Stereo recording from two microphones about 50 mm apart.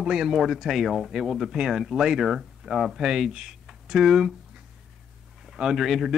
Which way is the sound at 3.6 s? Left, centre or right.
Centre.